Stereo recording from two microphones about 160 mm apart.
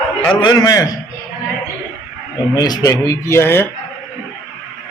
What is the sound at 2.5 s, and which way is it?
Speech, 25° left (ahead or behind).